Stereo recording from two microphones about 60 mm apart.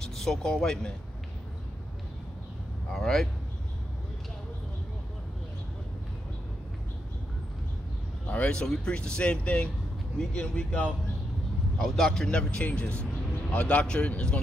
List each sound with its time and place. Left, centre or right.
0.0 s speech: centre
2.9 s speech: centre
8.3 s speech: left
11.8 s speech: centre